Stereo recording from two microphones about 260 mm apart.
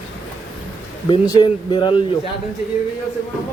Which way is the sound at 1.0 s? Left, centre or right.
Centre.